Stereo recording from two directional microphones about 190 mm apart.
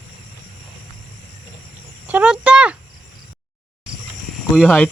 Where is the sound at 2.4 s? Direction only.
5° right (ahead or behind).